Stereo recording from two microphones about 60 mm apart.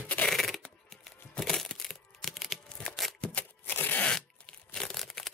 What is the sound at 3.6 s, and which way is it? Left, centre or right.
Crushing, left.